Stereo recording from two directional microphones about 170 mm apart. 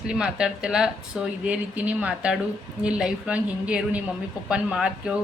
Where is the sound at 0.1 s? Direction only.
5° right (ahead or behind).